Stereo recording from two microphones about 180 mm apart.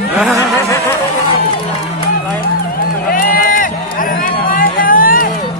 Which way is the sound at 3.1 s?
50° left (ahead or behind).